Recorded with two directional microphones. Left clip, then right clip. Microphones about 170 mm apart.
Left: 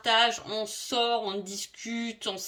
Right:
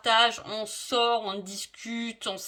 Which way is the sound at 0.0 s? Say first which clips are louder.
Right 1 dB; 40° right (ahead or behind).